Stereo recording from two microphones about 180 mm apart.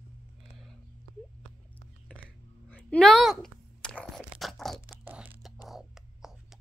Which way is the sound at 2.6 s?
5° left (ahead or behind).